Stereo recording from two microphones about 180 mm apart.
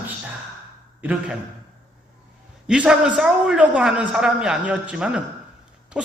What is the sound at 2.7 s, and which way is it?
A man's voice, 5° right (ahead or behind).